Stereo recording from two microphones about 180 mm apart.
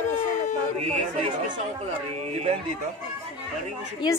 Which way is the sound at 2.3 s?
35° right (ahead or behind).